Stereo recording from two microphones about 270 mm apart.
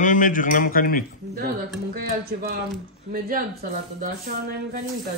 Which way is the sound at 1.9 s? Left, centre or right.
Right.